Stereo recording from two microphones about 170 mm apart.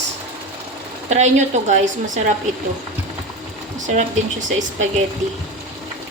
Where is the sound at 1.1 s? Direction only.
40° right (ahead or behind).